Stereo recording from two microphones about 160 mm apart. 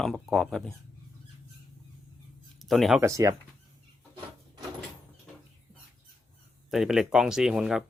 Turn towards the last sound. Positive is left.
turn(degrees=-5)  # may be behind; listen again after turning